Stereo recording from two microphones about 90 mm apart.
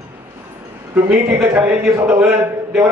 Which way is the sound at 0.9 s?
20° right (ahead or behind).